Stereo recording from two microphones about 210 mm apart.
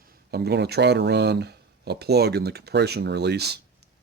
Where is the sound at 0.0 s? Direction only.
45° right (ahead or behind).